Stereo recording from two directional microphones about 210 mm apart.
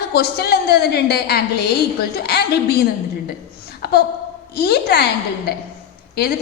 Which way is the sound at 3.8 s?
50° left (ahead or behind).